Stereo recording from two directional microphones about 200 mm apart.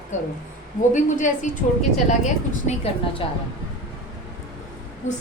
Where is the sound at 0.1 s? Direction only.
40° left (ahead or behind).